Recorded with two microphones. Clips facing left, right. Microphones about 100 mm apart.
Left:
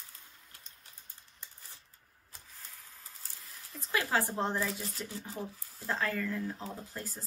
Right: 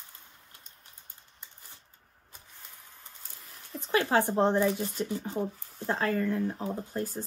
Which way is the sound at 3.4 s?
30° right (ahead or behind).